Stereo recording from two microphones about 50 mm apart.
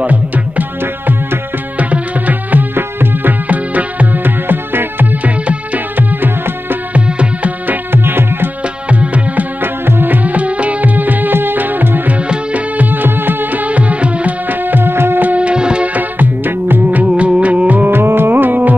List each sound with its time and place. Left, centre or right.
0.0 s music: right
2.7 s music: right
3.4 s music: right
6.9 s music: right
7.6 s music: right
8.8 s music: right
9.6 s music: right
12.3 s music: right
14.5 s music: right
15.3 s music: right
15.9 s music: right
17.0 s music: right
17.9 s music: right